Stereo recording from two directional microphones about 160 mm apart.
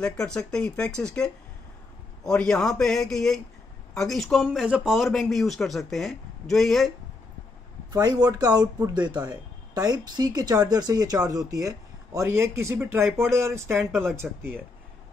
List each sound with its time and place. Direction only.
0.5 s speech: 5° left (ahead or behind)
7.9 s speech: 25° right (ahead or behind); by 14.4 s 5° right (ahead or behind)